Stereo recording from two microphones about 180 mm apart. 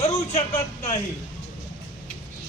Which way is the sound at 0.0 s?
35° left (ahead or behind).